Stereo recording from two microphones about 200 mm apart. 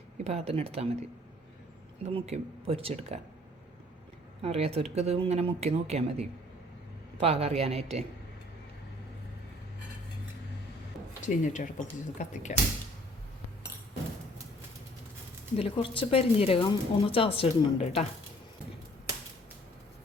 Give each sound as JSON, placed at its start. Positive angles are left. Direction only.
{"t": 0.3, "sound": "speech", "side_deg": -30}
{"t": 2.0, "sound": "speech", "side_deg": -30}
{"t": 4.4, "sound": "speech", "side_deg": -30}
{"t": 11.2, "sound": "speech", "side_deg": 40}
{"t": 15.5, "sound": "speech", "side_deg": 25}